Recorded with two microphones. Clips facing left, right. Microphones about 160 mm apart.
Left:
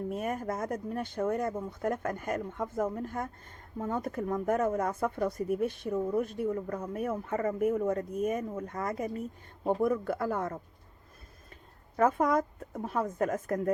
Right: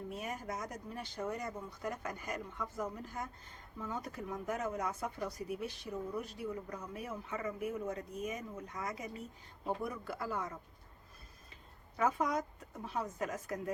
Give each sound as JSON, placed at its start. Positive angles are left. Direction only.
{"t": 0.1, "sound": "speech", "side_deg": 50}
{"t": 11.9, "sound": "speech", "side_deg": 55}